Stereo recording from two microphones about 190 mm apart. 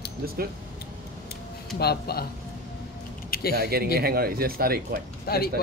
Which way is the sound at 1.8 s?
55° left (ahead or behind).